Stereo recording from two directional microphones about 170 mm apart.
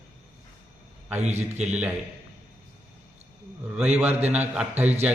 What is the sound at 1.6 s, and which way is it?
Speech, 10° right (ahead or behind).